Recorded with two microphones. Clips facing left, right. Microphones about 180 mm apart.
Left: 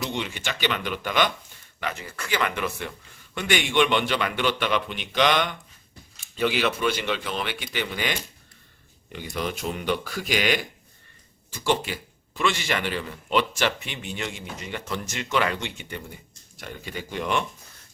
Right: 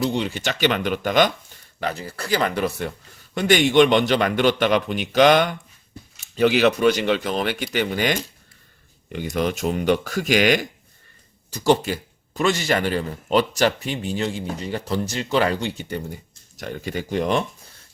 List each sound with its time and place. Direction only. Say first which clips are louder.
0.0 s a man's voice: right 7 dB; 35° right (ahead or behind)
9.3 s a man's voice: right 6 dB; 45° right (ahead or behind)